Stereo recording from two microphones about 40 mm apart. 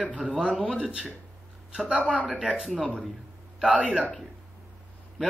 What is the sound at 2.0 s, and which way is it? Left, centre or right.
Speech, left.